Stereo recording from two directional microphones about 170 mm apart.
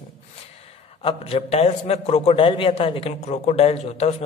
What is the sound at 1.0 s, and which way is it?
A man's voice, 35° left (ahead or behind).